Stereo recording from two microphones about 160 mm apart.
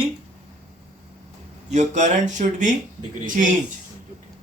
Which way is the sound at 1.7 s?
50° right (ahead or behind).